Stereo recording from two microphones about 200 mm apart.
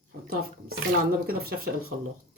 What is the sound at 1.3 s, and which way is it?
Speech, 50° right (ahead or behind).